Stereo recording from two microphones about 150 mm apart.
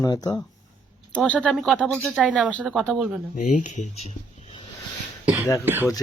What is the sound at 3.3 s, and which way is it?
Speech, 55° left (ahead or behind).